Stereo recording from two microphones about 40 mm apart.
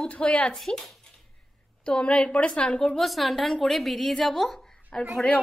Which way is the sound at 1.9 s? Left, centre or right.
Left.